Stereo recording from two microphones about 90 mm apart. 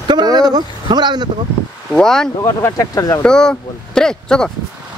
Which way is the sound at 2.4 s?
30° left (ahead or behind).